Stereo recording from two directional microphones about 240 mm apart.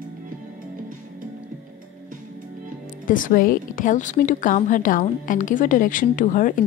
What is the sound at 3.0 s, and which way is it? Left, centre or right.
A woman's voice, left.